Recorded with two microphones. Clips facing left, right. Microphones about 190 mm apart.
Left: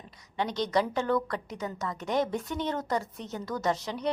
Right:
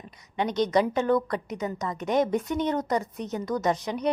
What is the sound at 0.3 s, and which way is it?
A woman's voice, 20° right (ahead or behind).